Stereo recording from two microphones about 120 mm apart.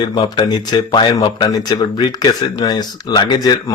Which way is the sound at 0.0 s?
40° left (ahead or behind).